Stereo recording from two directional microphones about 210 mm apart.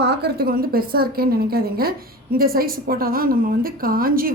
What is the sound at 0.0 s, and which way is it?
A woman's voice, 50° right (ahead or behind).